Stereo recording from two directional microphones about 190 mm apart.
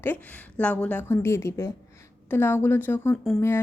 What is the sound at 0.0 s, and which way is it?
Speech, 10° left (ahead or behind).